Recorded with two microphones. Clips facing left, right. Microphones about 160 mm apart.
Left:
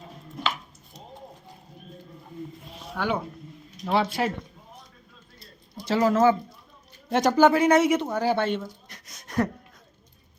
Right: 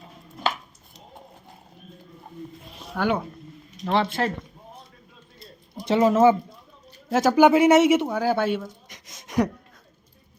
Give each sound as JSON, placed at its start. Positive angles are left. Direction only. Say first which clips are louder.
{"t": 2.9, "sound": "speech", "louder": "right 4 dB", "side_deg": -5}
{"t": 3.8, "sound": "speech", "louder": "right 1 dB", "side_deg": 5}
{"t": 5.9, "sound": "speech", "louder": "right 3 dB", "side_deg": -20}
{"t": 7.1, "sound": "speech", "louder": "right 2 dB", "side_deg": -5}
{"t": 7.3, "sound": "speech", "louder": "right 3 dB", "side_deg": -15}
{"t": 8.0, "sound": "speech", "louder": "right 1 dB", "side_deg": -5}